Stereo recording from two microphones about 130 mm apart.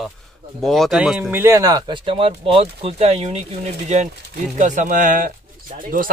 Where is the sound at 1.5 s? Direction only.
30° right (ahead or behind); by 3.4 s 50° right (ahead or behind).